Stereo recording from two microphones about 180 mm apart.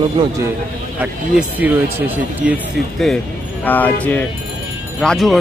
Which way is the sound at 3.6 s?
10° left (ahead or behind).